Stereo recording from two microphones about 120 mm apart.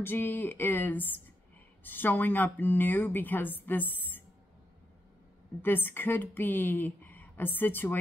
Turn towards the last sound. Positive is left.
turn(degrees=15)  # may be behind; listen again after turning